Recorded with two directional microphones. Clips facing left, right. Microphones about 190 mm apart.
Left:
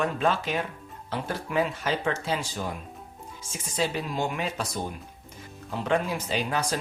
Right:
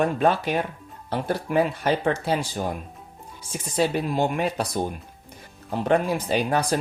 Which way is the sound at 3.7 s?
50° right (ahead or behind).